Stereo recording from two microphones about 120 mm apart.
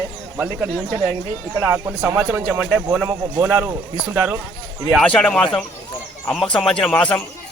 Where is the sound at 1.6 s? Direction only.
20° right (ahead or behind).